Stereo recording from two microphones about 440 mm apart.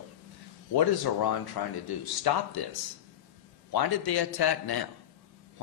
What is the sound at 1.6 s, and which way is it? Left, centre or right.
Speech, left.